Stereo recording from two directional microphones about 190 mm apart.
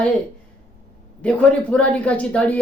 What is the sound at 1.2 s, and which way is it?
A woman's voice, 5° left (ahead or behind).